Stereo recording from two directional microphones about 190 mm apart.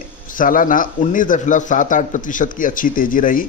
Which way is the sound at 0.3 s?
45° left (ahead or behind).